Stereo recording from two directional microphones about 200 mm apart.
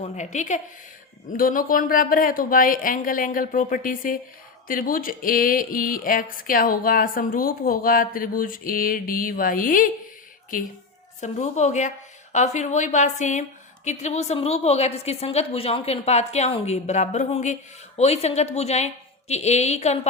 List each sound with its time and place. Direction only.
0.0 s a woman's voice: 35° left (ahead or behind)
11.2 s a woman's voice: 35° left (ahead or behind)